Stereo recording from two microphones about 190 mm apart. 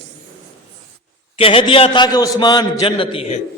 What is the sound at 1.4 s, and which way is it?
A man's voice, 30° left (ahead or behind).